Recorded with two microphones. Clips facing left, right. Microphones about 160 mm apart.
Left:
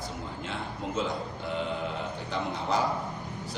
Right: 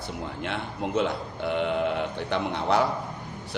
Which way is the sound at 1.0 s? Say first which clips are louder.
Right 5 dB; 65° right (ahead or behind).